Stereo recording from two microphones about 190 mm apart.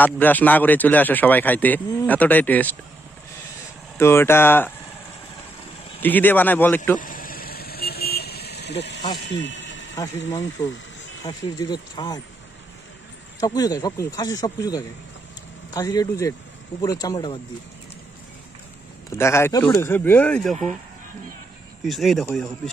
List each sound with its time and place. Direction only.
0.0 s speech: 10° left (ahead or behind)
4.0 s speech: 10° left (ahead or behind)
5.9 s speech: 10° left (ahead or behind)
7.0 s vehicle: 45° left (ahead or behind); by 9.0 s 65° left (ahead or behind)
9.2 s a sound: 70° left (ahead or behind)
10.6 s speech: 20° left (ahead or behind)
13.4 s speech: 20° left (ahead or behind)
19.1 s speech: 15° left (ahead or behind)
21.8 s speech: centre (ahead or behind)